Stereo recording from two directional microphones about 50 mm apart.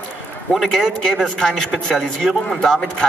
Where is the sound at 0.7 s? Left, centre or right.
Centre.